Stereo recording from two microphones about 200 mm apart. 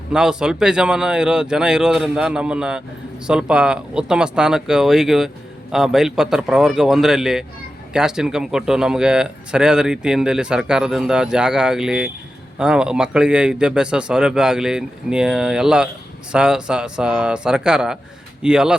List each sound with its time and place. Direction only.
0.1 s speech: 5° right (ahead or behind)